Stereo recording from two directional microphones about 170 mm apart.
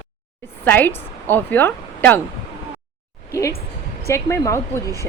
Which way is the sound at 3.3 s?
15° left (ahead or behind).